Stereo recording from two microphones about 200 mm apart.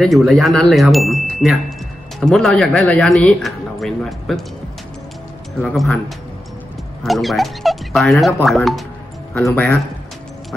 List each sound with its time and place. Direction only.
0.0 s speech: centre (ahead or behind)
5.6 s speech: centre (ahead or behind)